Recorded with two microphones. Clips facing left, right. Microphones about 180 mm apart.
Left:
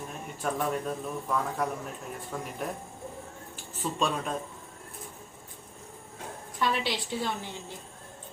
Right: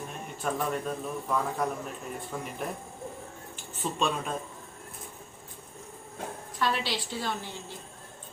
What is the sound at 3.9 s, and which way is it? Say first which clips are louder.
Speech: even; centre (ahead or behind).